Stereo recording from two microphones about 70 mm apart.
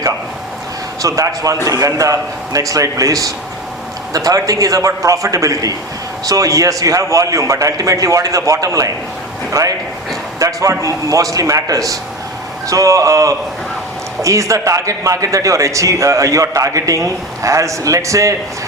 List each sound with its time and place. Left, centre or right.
1.0 s a man's voice: right